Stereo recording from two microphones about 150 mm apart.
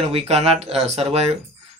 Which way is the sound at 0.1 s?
45° right (ahead or behind).